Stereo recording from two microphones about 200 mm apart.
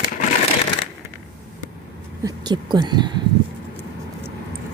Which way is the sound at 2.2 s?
20° right (ahead or behind).